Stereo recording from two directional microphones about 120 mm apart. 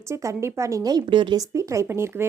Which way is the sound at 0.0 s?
25° right (ahead or behind).